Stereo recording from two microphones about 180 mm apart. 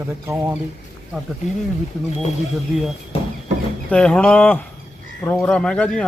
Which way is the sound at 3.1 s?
35° left (ahead or behind).